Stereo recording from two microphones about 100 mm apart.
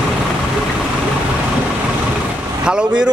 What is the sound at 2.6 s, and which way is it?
Speech, 10° right (ahead or behind).